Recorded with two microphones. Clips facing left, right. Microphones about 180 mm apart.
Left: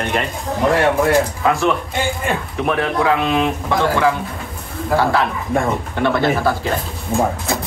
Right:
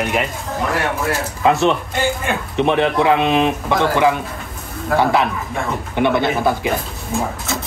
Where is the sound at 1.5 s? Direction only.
25° right (ahead or behind).